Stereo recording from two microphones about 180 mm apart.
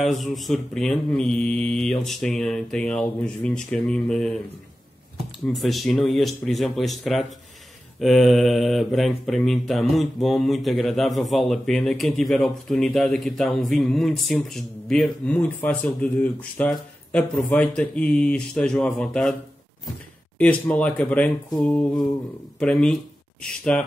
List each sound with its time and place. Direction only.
0.0 s speech: centre (ahead or behind)
5.5 s speech: centre (ahead or behind)
20.3 s speech: 5° left (ahead or behind)